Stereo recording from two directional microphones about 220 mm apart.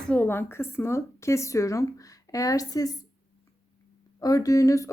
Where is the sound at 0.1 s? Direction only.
10° left (ahead or behind).